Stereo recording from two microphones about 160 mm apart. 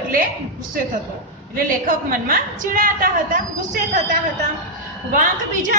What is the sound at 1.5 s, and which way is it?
A woman's voice, 60° right (ahead or behind).